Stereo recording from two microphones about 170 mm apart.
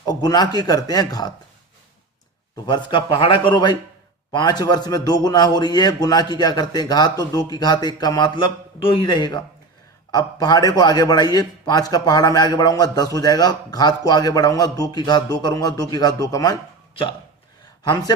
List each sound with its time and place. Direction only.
0.0 s a man's voice: 25° left (ahead or behind)
2.6 s a man's voice: 30° left (ahead or behind)
17.8 s a man's voice: 25° left (ahead or behind)